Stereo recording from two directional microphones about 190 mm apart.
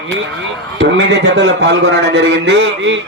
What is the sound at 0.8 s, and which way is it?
A man's voice, 75° right (ahead or behind).